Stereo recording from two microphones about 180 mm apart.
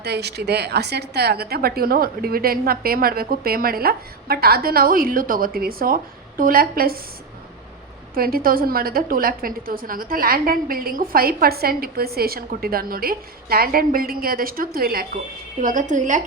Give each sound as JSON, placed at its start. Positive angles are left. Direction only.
{"t": 0.0, "sound": "a woman's voice", "side_deg": -65}
{"t": 8.1, "sound": "a woman's voice", "side_deg": -55}
{"t": 15.6, "sound": "a woman's voice", "side_deg": -45}